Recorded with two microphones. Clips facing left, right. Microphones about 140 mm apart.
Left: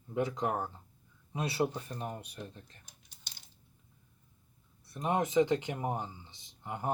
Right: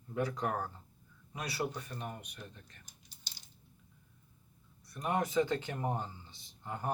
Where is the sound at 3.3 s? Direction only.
55° left (ahead or behind).